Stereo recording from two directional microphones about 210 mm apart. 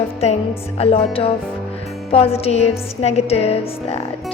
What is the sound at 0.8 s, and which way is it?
Speech, 25° left (ahead or behind).